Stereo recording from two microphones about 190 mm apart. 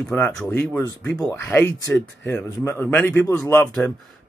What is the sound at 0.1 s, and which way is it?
Speech, 5° left (ahead or behind).